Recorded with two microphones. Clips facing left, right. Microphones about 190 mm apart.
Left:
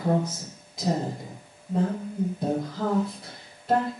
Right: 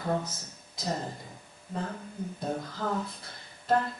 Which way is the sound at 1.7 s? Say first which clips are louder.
Left 9 dB; 15° left (ahead or behind).